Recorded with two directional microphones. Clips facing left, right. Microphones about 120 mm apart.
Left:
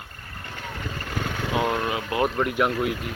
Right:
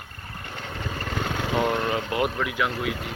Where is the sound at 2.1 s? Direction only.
25° left (ahead or behind).